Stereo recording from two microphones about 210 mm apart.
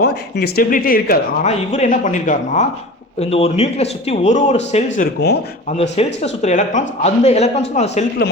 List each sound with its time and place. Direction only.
0.0 s speech: 50° left (ahead or behind)
1.5 s a man's voice: 30° left (ahead or behind)
5.2 s speech: 50° left (ahead or behind)
5.6 s a man's voice: 30° left (ahead or behind)
8.2 s speech: 50° left (ahead or behind)